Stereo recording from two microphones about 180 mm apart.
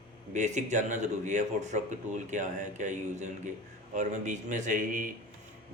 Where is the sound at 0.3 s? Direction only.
40° right (ahead or behind).